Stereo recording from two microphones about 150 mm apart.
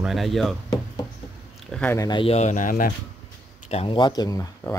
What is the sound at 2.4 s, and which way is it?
Speech, 55° left (ahead or behind).